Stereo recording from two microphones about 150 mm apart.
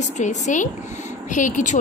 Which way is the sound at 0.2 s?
55° left (ahead or behind).